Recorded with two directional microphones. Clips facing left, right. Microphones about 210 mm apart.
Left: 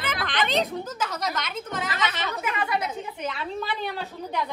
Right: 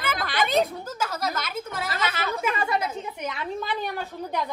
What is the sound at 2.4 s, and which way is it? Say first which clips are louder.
A woman's voice: right 1 dB; 25° right (ahead or behind).